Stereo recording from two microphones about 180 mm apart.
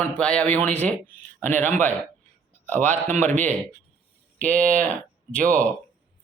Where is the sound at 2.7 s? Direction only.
10° left (ahead or behind).